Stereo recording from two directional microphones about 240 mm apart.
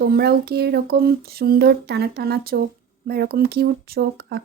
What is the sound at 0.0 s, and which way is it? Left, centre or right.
A woman's voice, right.